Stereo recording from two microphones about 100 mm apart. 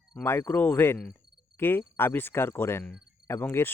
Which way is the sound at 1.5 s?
20° left (ahead or behind).